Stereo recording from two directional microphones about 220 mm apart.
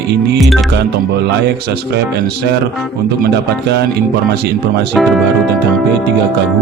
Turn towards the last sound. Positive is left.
turn(degrees=0)  # may be behind; listen again after turning